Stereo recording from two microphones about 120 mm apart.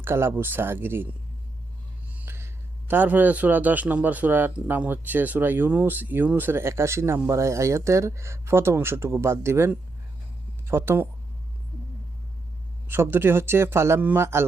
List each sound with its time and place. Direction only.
0.0 s speech: 20° right (ahead or behind)
2.1 s a man's voice: 20° right (ahead or behind)
12.9 s speech: 20° right (ahead or behind)